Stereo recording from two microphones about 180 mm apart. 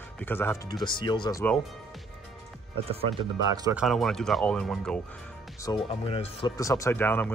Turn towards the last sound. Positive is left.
turn(degrees=10)  # may be behind; listen again after turning